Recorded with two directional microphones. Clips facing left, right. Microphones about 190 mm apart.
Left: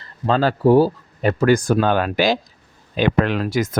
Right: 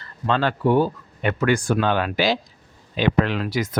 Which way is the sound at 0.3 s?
35° left (ahead or behind).